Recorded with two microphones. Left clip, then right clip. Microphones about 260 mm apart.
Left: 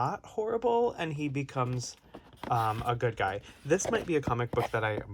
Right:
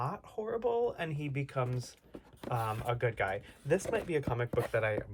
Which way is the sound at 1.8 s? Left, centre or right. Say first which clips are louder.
Left 6 dB; centre.